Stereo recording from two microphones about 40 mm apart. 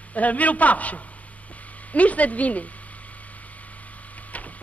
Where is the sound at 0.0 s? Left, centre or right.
Left.